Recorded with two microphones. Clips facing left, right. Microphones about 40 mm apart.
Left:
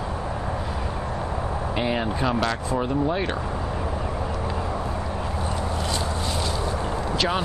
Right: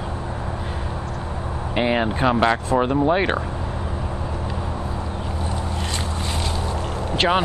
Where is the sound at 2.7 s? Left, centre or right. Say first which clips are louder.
Right 5 dB; right.